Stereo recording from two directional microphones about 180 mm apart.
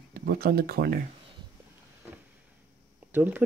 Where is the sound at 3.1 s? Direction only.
10° right (ahead or behind).